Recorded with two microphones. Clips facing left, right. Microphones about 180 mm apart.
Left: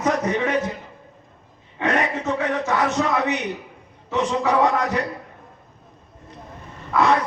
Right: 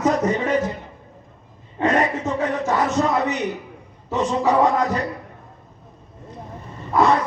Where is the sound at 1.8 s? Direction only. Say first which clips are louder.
Right 3 dB; 70° left (ahead or behind).